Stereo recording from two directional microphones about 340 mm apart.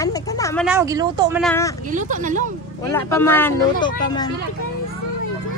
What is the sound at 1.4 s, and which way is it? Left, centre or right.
Speech, centre.